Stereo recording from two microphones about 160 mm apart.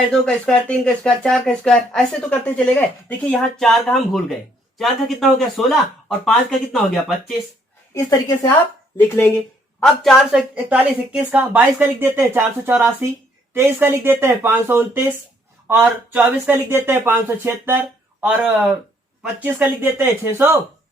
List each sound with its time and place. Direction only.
0.1 s speech: 5° left (ahead or behind)
7.9 s a woman's voice: 20° left (ahead or behind)
9.8 s a woman's voice: centre (ahead or behind)